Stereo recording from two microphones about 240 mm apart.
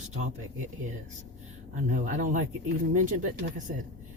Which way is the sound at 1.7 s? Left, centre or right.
Right.